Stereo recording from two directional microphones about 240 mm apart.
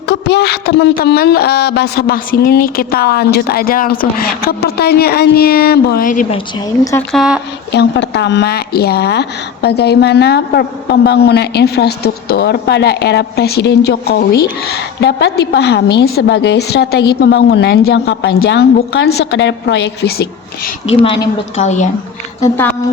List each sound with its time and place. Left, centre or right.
0.1 s speech: left
7.1 s speech: centre
7.7 s a woman's voice: left
20.8 s a woman's voice: left
22.4 s speech: centre